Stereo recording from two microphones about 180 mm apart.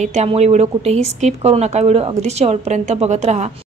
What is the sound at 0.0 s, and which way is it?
A woman's voice, 40° right (ahead or behind).